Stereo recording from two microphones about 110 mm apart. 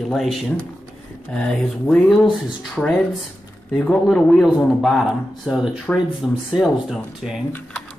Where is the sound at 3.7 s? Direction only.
10° left (ahead or behind).